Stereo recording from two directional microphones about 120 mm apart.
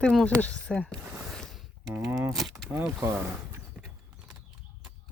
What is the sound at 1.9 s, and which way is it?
Speech, 20° right (ahead or behind).